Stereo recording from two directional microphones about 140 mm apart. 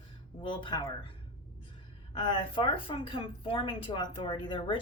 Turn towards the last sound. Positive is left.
turn(degrees=35)  # may be behind; listen again after turning